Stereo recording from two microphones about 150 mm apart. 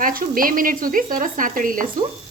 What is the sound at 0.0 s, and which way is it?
Speech, 70° right (ahead or behind).